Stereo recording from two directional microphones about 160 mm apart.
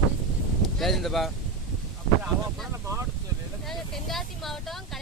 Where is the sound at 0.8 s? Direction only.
Centre (ahead or behind).